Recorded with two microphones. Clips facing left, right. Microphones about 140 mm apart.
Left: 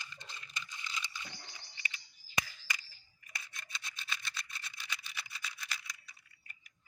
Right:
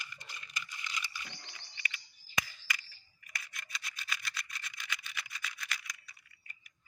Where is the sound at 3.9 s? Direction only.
25° left (ahead or behind).